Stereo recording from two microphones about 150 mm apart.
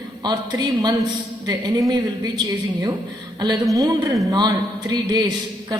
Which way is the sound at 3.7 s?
25° right (ahead or behind).